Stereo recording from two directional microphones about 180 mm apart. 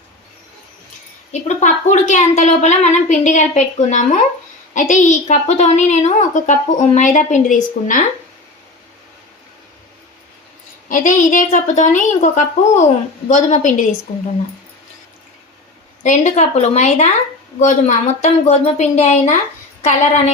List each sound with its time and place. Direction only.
1.3 s a woman's voice: 40° left (ahead or behind)
10.8 s a woman's voice: 50° left (ahead or behind)
16.0 s a woman's voice: 40° left (ahead or behind)